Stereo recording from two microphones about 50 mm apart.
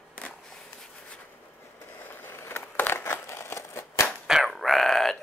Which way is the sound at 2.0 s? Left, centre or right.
Left.